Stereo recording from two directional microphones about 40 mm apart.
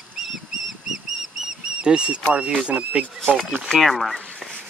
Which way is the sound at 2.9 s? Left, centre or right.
Right.